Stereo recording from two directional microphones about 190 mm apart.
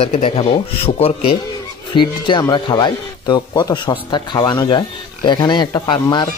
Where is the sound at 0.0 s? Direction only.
30° left (ahead or behind).